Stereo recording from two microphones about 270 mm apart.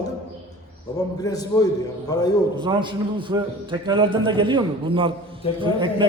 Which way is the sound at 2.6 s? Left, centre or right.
Centre.